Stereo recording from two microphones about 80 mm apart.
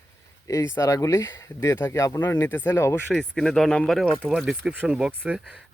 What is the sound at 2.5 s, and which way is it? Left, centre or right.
Speech, left.